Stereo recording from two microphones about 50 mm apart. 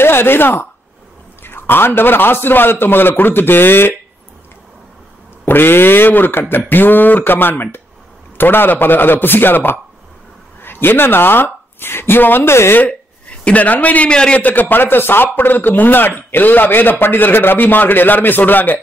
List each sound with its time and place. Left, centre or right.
0.0 s a man's voice: left
5.4 s a man's voice: left
13.4 s a man's voice: left
14.1 s a man's voice: centre
14.4 s a man's voice: left